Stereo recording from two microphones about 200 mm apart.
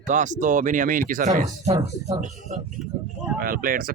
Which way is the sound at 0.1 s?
40° right (ahead or behind).